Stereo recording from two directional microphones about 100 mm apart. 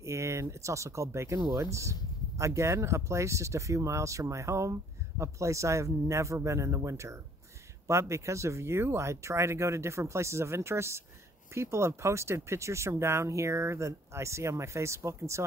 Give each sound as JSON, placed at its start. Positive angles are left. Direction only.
{"t": 0.0, "sound": "speech", "side_deg": -30}